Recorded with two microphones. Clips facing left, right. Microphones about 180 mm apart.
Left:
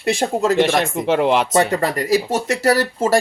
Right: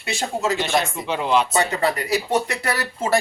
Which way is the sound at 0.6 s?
55° left (ahead or behind).